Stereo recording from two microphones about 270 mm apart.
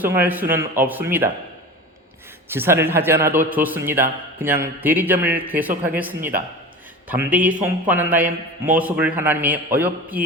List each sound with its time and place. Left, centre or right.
0.0 s a man's voice: centre
2.5 s a man's voice: centre